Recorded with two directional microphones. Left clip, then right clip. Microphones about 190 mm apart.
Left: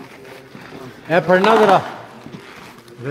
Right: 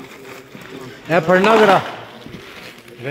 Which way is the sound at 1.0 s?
35° right (ahead or behind).